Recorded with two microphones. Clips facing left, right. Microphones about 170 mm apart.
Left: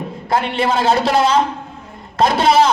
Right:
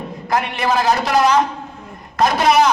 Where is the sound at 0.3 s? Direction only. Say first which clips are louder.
Left 2 dB; 30° left (ahead or behind).